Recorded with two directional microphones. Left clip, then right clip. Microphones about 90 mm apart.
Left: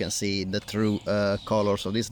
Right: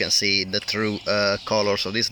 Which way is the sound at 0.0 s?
25° left (ahead or behind).